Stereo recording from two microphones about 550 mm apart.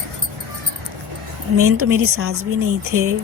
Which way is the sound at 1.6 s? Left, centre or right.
Right.